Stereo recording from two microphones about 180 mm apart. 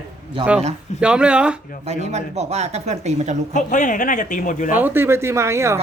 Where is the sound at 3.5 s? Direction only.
45° left (ahead or behind).